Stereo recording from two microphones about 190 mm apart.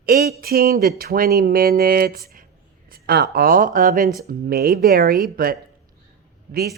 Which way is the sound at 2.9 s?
55° right (ahead or behind).